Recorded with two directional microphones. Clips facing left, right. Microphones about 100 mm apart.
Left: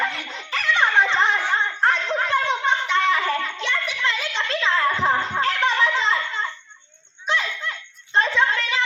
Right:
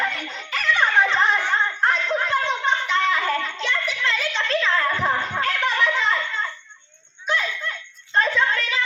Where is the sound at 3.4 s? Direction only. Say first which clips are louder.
Even; 15° left (ahead or behind).